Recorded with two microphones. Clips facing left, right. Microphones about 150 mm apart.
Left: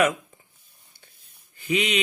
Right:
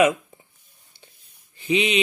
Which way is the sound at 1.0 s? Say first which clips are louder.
Right 5 dB; 30° right (ahead or behind).